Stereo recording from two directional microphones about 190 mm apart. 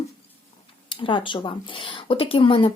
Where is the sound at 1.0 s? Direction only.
25° left (ahead or behind).